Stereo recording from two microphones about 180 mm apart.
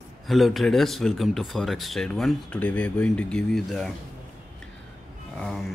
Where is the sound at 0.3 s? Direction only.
Centre (ahead or behind).